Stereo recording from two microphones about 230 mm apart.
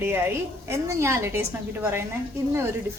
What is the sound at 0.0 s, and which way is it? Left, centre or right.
A woman's voice, centre.